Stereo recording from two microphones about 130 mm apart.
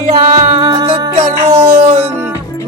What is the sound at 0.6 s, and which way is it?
Music, 40° right (ahead or behind).